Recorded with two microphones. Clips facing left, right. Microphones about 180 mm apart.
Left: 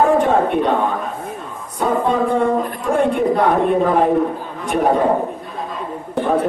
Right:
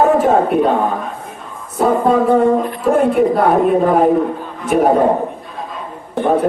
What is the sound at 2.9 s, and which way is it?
A man's voice, centre (ahead or behind).